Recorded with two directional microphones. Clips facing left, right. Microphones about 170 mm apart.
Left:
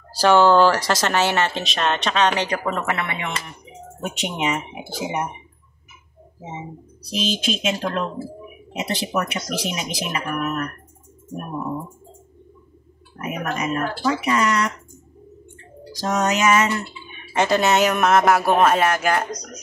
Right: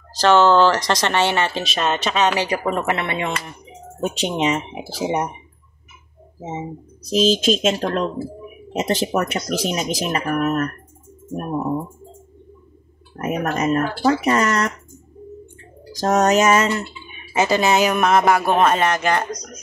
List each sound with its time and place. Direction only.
0.1 s speech: 10° left (ahead or behind); by 3.0 s 10° right (ahead or behind)
3.0 s speech: 30° right (ahead or behind)
7.1 s speech: 45° right (ahead or behind)
13.1 s speech: 40° right (ahead or behind)
16.0 s speech: 40° right (ahead or behind)
17.2 s speech: 5° right (ahead or behind)